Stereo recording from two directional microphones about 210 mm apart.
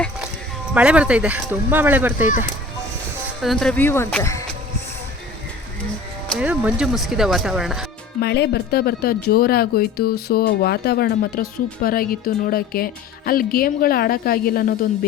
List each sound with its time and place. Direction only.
0.7 s speech: 5° right (ahead or behind)
3.4 s speech: centre (ahead or behind)
6.4 s speech: 5° right (ahead or behind)
8.2 s speech: 50° left (ahead or behind)